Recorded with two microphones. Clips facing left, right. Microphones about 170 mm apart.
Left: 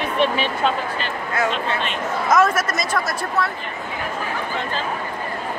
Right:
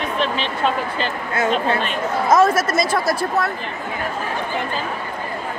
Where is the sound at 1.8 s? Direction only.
30° right (ahead or behind).